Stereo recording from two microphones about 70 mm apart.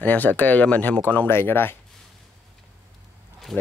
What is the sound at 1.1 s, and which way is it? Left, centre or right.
Speech, left.